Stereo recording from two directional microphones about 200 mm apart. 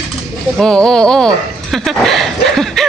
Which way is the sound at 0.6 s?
5° left (ahead or behind).